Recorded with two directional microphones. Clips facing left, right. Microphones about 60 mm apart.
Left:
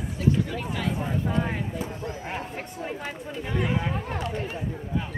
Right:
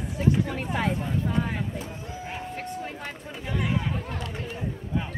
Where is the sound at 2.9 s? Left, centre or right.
Centre.